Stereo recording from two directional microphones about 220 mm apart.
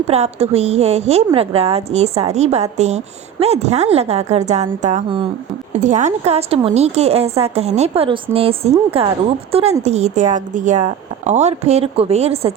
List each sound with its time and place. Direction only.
0.1 s a woman's voice: 30° right (ahead or behind)